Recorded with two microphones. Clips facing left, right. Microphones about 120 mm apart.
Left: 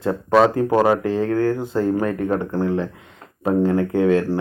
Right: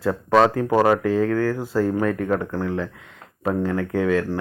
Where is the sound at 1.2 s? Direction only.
20° left (ahead or behind).